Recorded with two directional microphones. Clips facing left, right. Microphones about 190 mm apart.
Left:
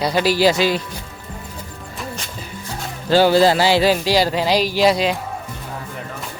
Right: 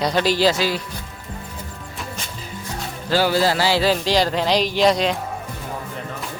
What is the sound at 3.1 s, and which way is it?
Speech, 25° left (ahead or behind).